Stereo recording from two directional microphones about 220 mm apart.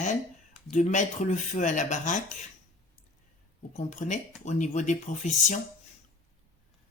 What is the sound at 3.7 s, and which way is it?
Speech, 35° left (ahead or behind).